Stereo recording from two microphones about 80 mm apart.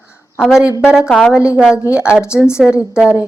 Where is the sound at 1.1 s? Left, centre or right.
Centre.